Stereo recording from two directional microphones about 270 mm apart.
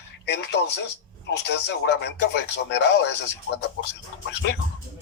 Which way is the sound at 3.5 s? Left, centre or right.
Left.